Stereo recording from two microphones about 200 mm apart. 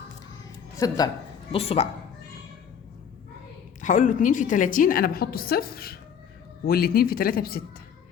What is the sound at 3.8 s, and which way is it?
A woman's voice, 40° left (ahead or behind).